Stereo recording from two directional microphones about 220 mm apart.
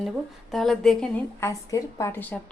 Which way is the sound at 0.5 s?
Centre (ahead or behind).